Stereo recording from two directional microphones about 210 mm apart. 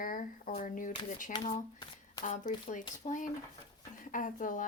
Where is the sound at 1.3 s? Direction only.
20° left (ahead or behind).